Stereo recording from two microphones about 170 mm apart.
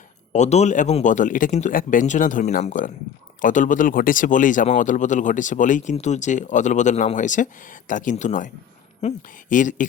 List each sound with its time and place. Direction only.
0.3 s speech: 40° left (ahead or behind)